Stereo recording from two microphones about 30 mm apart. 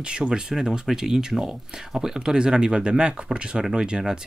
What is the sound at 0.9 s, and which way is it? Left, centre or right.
Speech, centre.